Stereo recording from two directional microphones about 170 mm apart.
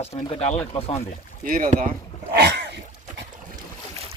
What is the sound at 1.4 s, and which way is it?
Speech, 50° right (ahead or behind).